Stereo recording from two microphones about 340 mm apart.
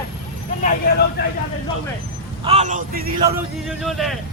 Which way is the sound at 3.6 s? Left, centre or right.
Centre.